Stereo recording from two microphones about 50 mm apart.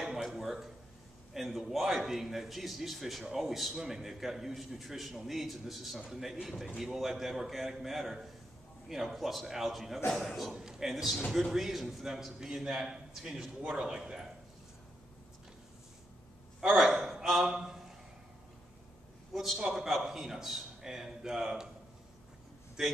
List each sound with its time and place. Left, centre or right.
0.0 s a sound: centre
1.3 s a man's voice: centre
13.6 s speech: right
16.7 s a man's voice: centre
17.5 s a sound: centre
19.3 s a man's voice: centre